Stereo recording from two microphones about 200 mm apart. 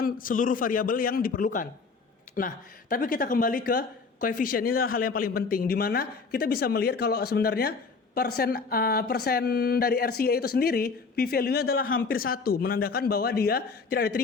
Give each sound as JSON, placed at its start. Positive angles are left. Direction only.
{"t": 0.0, "sound": "speech", "side_deg": 45}